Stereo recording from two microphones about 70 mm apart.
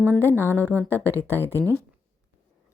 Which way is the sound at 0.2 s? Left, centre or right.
Left.